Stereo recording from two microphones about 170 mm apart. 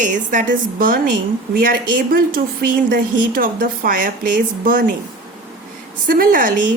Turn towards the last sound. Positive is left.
turn(degrees=-55)  # may be behind; listen again after turning